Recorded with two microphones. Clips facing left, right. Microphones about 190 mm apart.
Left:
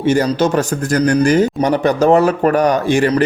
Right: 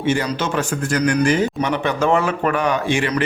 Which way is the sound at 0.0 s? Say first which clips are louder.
Left 6 dB; 40° left (ahead or behind).